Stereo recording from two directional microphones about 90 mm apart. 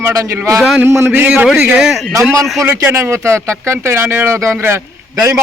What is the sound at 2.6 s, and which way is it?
Speech, 25° right (ahead or behind).